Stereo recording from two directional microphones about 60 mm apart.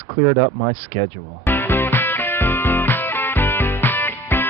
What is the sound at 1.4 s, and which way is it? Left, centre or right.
Music, left.